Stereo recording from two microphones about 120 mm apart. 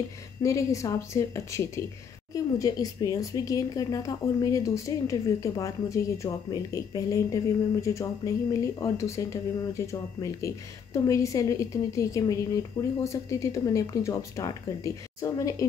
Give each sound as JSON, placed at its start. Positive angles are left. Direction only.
{"t": 0.4, "sound": "speech", "side_deg": 25}